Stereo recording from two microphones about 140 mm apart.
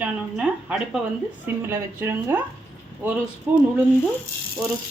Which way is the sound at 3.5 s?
10° right (ahead or behind).